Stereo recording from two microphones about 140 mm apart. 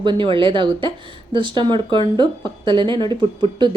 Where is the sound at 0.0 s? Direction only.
35° right (ahead or behind).